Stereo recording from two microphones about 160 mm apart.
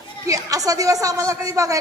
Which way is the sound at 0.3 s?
20° right (ahead or behind).